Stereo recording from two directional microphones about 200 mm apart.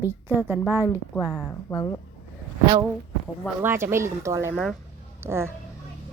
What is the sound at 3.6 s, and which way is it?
Speech, 10° right (ahead or behind).